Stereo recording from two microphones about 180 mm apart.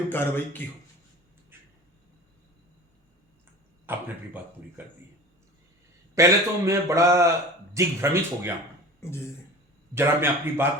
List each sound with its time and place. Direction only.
0.1 s speech: 10° left (ahead or behind)
1.5 s a sound: 10° right (ahead or behind)
3.9 s a man's voice: 10° right (ahead or behind)
6.1 s a man's voice: 15° right (ahead or behind)
9.9 s a man's voice: 15° right (ahead or behind)